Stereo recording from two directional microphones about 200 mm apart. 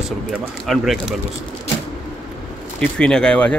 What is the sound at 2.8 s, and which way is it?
Speech, 5° left (ahead or behind).